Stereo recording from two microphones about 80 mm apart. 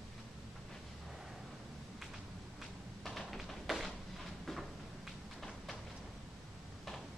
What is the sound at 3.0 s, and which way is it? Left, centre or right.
Tap, centre.